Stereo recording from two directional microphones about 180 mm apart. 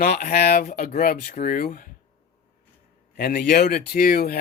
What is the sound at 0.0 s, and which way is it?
Speech, 60° left (ahead or behind).